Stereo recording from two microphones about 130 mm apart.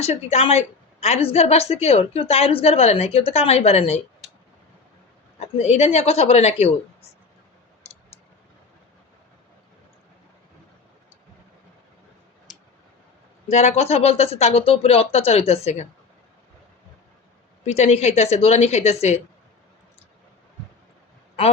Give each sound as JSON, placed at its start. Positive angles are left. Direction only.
{"t": 0.0, "sound": "a woman's voice", "side_deg": 55}
{"t": 5.6, "sound": "a woman's voice", "side_deg": 60}
{"t": 12.5, "sound": "tick", "side_deg": 0}
{"t": 13.5, "sound": "a woman's voice", "side_deg": 60}
{"t": 17.7, "sound": "a woman's voice", "side_deg": 55}